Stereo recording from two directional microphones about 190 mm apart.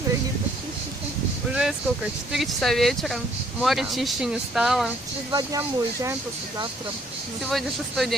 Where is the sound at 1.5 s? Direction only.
5° right (ahead or behind).